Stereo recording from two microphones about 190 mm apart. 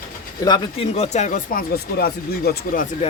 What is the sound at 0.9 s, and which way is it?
Speech, 35° left (ahead or behind).